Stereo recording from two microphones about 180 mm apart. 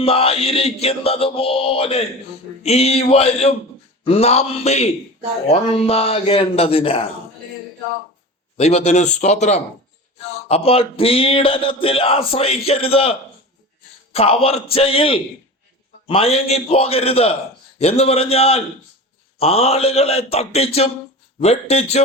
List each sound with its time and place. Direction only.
0.0 s speech: 30° left (ahead or behind)
8.5 s speech: 35° left (ahead or behind)